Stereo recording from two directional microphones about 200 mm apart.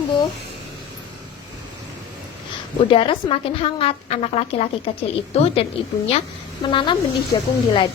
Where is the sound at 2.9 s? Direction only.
25° left (ahead or behind).